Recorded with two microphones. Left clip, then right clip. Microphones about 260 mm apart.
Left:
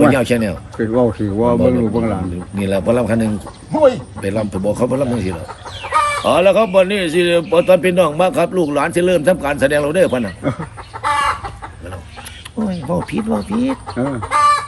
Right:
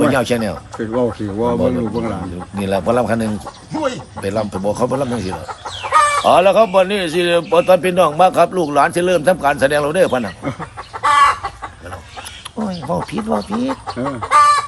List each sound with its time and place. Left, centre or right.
0.0 s a man's voice: centre
0.8 s speech: centre
2.6 s a man's voice: centre
3.7 s speech: centre
4.2 s a man's voice: centre
11.0 s chicken: right
12.5 s a sound: centre
13.1 s a man's voice: centre
14.2 s chicken: right